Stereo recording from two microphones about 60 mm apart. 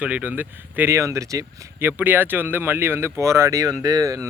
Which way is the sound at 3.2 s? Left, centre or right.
Right.